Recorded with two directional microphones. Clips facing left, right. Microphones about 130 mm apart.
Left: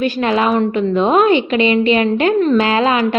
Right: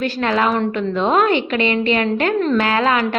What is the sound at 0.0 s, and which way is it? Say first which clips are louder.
Speech: left 3 dB; 15° left (ahead or behind).